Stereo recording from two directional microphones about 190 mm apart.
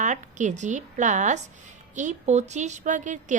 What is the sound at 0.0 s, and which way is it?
A woman's voice, 40° right (ahead or behind).